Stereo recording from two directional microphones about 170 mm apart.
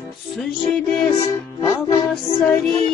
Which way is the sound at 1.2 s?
20° left (ahead or behind).